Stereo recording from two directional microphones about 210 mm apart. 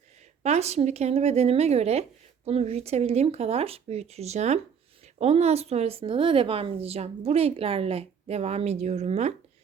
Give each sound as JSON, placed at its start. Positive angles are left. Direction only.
{"t": 0.4, "sound": "a woman's voice", "side_deg": -30}